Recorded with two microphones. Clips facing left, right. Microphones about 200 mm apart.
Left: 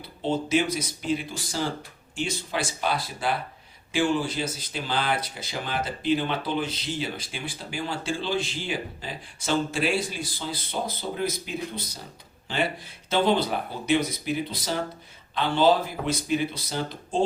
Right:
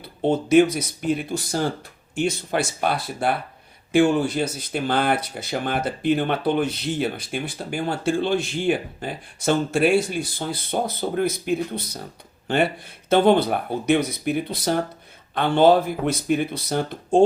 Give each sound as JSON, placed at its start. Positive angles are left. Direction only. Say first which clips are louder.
{"t": 0.2, "sound": "speech", "louder": "right 8 dB", "side_deg": -55}